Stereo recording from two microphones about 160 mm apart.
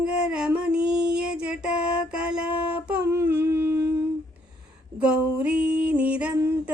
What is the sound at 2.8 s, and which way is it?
Humming, 15° right (ahead or behind).